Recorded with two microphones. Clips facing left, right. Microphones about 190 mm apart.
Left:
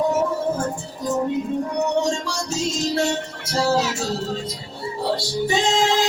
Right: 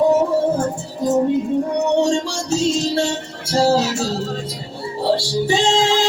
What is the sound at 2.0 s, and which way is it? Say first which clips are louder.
Music: right 4 dB; 30° right (ahead or behind).